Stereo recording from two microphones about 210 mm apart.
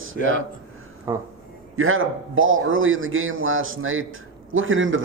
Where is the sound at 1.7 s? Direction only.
75° right (ahead or behind).